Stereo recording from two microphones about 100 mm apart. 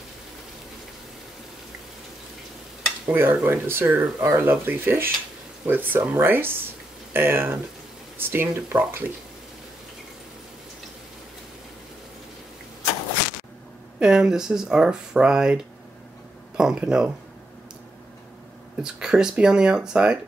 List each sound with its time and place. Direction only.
3.1 s speech: 20° right (ahead or behind)
13.9 s speech: 5° right (ahead or behind)
18.8 s speech: 5° right (ahead or behind)